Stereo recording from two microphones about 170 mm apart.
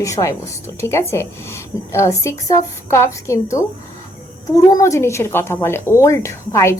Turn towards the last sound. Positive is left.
turn(degrees=15)  # may be behind; listen again after turning